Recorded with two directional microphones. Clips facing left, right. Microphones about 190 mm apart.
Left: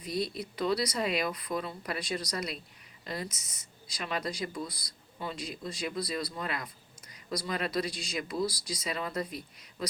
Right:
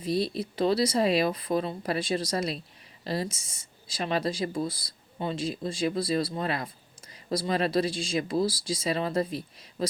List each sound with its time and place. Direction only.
0.0 s speech: 30° right (ahead or behind)